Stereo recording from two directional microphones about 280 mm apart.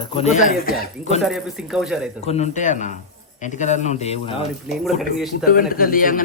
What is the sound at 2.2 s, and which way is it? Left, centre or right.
Speech, left.